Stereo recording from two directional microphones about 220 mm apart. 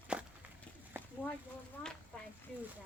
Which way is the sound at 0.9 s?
10° right (ahead or behind).